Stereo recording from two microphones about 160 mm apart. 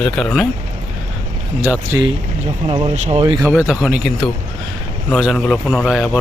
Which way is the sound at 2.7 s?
35° right (ahead or behind).